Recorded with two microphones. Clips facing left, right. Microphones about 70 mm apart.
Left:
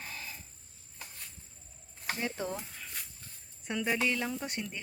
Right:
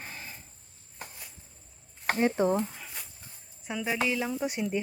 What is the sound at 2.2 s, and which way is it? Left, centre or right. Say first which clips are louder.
Speech: right 12 dB; right.